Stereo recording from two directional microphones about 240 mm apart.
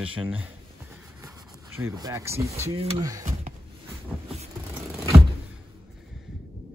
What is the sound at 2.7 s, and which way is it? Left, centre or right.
Speech, right.